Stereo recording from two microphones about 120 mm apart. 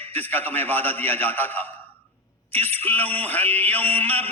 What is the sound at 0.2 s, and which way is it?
Mantra, 15° left (ahead or behind).